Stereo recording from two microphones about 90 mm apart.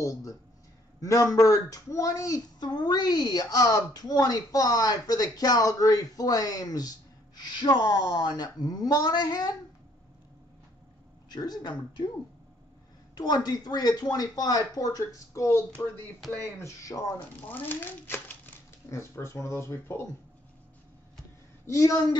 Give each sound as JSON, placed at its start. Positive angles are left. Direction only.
{"t": 0.0, "sound": "speech", "side_deg": 40}
{"t": 11.2, "sound": "speech", "side_deg": 50}
{"t": 13.1, "sound": "speech", "side_deg": 50}
{"t": 17.5, "sound": "speech", "side_deg": 20}
{"t": 21.6, "sound": "speech", "side_deg": 35}